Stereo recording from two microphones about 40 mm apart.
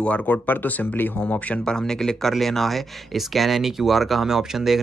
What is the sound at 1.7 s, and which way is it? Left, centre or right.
Speech, centre.